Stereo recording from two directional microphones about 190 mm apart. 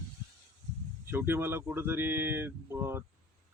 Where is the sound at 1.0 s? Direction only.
10° right (ahead or behind).